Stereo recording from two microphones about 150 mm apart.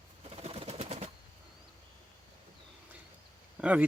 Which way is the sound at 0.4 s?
45° right (ahead or behind).